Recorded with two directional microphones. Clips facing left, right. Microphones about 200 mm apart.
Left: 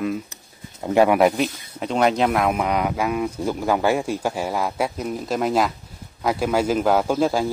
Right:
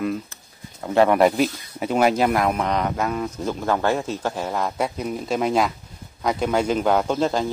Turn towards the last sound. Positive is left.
turn(degrees=5)  # may be behind; listen again after turning